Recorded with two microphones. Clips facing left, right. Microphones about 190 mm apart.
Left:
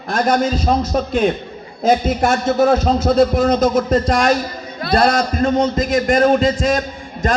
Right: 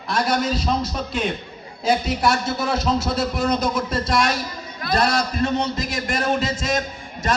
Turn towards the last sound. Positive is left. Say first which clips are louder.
# left 4 dB
turn(degrees=40)  # may be behind; listen again after turning